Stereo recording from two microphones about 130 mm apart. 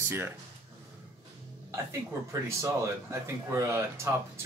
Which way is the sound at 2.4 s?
20° right (ahead or behind).